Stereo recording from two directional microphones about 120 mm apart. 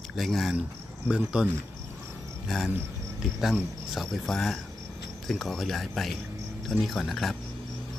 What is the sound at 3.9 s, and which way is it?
Speech, centre (ahead or behind).